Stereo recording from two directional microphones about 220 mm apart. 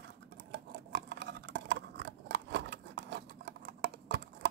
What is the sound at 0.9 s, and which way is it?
Scissors, 50° right (ahead or behind).